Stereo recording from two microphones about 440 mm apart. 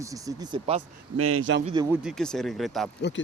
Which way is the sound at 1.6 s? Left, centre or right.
Centre.